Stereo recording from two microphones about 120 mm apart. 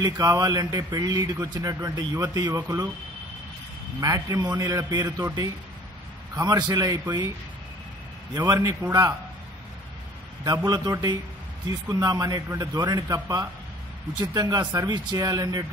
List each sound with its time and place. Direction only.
0.0 s a man's voice: 35° right (ahead or behind)
4.0 s a man's voice: 30° right (ahead or behind)
8.4 s a man's voice: 30° right (ahead or behind)
10.4 s a man's voice: 35° right (ahead or behind)